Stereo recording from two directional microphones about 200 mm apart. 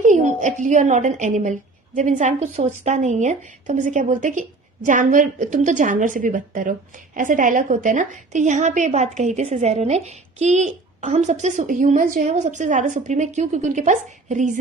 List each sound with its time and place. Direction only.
0.0 s a woman's voice: 40° right (ahead or behind)